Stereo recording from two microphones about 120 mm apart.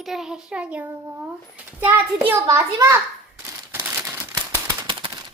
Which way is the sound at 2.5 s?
25° right (ahead or behind).